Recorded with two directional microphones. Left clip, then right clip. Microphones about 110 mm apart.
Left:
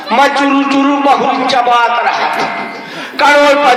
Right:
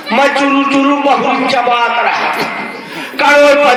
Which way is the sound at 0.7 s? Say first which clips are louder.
Left 1 dB; 60° left (ahead or behind).